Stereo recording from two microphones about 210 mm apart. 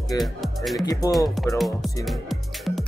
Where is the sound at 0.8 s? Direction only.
15° left (ahead or behind).